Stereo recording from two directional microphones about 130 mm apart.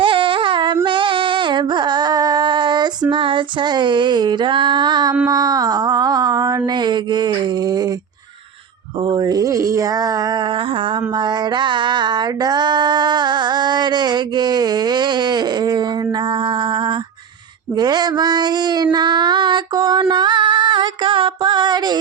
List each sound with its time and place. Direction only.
0.0 s a sound: 40° right (ahead or behind)
3.1 s female singing: 40° right (ahead or behind)
5.3 s mantra: 30° right (ahead or behind)
6.7 s female singing: 35° right (ahead or behind)
9.0 s a sound: 35° right (ahead or behind)
16.3 s mantra: 40° right (ahead or behind)
17.7 s child singing: 30° right (ahead or behind)